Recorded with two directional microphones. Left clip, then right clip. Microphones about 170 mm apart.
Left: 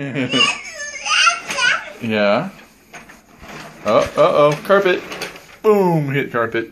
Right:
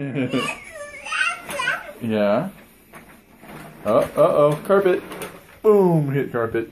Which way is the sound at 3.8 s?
Centre (ahead or behind).